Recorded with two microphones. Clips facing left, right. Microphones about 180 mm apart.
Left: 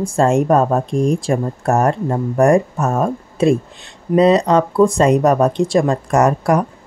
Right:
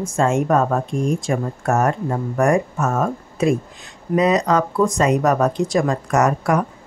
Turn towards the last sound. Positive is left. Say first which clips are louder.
# left 3 dB
turn(degrees=35)  # may be behind; listen again after turning